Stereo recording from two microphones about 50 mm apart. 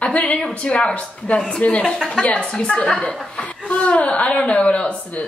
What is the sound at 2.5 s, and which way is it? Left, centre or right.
Speech, centre.